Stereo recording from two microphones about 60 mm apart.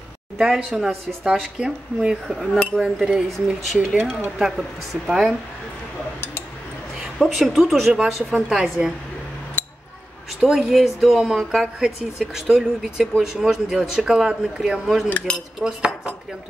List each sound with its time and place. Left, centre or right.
0.4 s speech: centre
2.2 s speech: centre
7.2 s speech: centre
9.6 s a sound: left
10.4 s speech: centre
15.3 s cutlery: centre
15.6 s speech: centre